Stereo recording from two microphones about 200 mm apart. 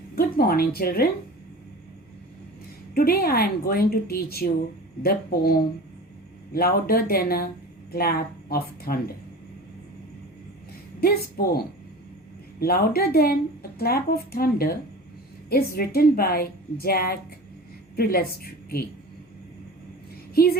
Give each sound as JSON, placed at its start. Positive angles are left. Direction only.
{"t": 0.2, "sound": "speech", "side_deg": 50}
{"t": 2.9, "sound": "a woman's voice", "side_deg": 50}
{"t": 11.0, "sound": "a woman's voice", "side_deg": 50}
{"t": 20.3, "sound": "speech", "side_deg": 50}